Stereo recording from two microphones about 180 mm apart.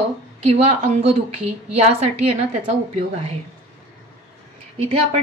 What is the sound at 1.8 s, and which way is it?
Speech, 35° right (ahead or behind).